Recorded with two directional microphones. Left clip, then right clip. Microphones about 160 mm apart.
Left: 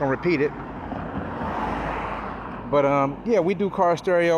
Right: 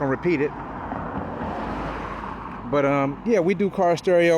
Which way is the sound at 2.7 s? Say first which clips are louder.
Left 1 dB; 40° right (ahead or behind).